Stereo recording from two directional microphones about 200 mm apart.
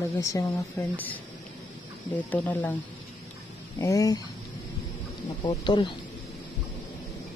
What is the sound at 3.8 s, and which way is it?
Speech, 15° left (ahead or behind).